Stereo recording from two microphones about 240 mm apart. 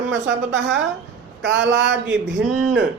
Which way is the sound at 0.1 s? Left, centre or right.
Right.